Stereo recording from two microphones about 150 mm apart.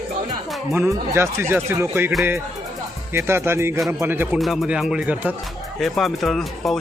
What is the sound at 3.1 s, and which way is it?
A man's voice, 15° right (ahead or behind).